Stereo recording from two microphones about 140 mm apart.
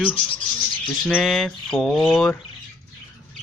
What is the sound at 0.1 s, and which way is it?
Speech, 40° left (ahead or behind).